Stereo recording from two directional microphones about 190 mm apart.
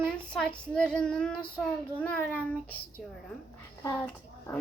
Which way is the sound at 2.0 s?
10° left (ahead or behind).